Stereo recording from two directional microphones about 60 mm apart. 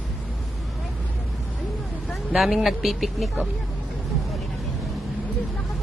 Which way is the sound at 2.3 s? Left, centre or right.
Centre.